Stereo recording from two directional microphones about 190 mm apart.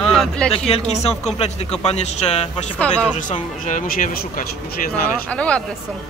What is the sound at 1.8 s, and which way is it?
Speech, 35° left (ahead or behind).